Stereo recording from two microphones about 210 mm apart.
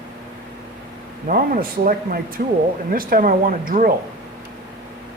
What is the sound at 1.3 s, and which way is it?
Speech, 45° right (ahead or behind).